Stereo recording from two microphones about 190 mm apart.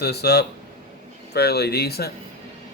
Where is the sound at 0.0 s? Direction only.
60° left (ahead or behind).